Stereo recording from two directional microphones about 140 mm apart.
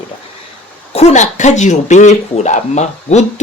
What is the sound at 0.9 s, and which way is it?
Speech, 50° left (ahead or behind).